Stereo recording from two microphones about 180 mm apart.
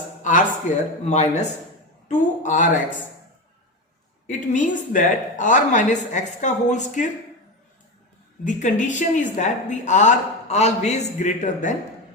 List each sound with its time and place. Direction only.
0.3 s a man's voice: 45° left (ahead or behind)
4.3 s speech: 45° left (ahead or behind)
8.4 s a man's voice: 45° left (ahead or behind)